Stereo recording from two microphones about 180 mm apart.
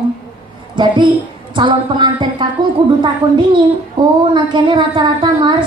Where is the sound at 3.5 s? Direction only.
25° right (ahead or behind).